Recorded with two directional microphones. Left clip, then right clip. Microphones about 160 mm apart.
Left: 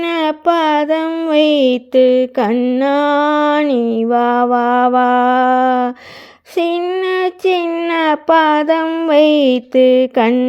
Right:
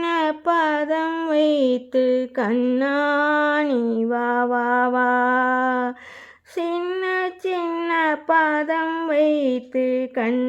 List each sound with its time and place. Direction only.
0.0 s child singing: 25° left (ahead or behind)
1.3 s a sound: 25° left (ahead or behind)
2.6 s mantra: 20° left (ahead or behind)
2.8 s mantra: 30° left (ahead or behind)
7.0 s child singing: 35° left (ahead or behind)
7.9 s mantra: 35° left (ahead or behind)